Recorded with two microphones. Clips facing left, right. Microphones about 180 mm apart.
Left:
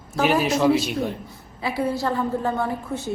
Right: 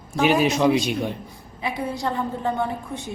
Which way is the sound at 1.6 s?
20° right (ahead or behind).